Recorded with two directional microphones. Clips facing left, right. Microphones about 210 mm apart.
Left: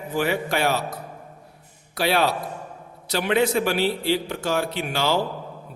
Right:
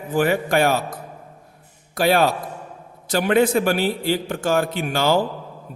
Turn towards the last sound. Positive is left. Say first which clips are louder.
# right 4 dB
turn(degrees=-50)  # may be behind; listen again after turning